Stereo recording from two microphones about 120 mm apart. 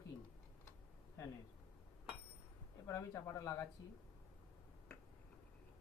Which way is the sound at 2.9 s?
25° left (ahead or behind).